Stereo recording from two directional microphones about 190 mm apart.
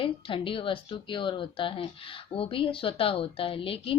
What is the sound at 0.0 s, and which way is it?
A woman's voice, 30° left (ahead or behind).